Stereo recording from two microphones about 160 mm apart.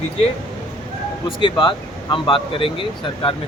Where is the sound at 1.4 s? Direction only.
30° left (ahead or behind).